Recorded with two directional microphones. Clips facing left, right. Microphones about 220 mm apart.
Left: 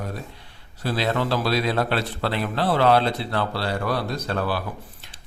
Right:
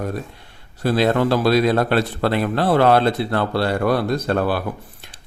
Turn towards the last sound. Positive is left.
turn(degrees=-55)  # may be behind; listen again after turning